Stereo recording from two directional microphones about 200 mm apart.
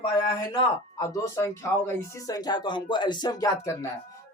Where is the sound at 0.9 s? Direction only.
15° left (ahead or behind).